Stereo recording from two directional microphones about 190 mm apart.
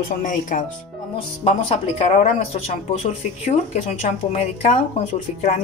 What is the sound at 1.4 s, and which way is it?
Speech, 30° left (ahead or behind).